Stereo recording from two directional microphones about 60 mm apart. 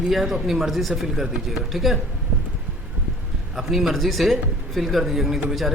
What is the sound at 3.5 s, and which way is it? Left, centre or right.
Speech, centre.